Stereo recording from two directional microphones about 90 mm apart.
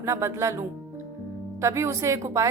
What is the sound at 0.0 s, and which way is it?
Speech, 30° right (ahead or behind).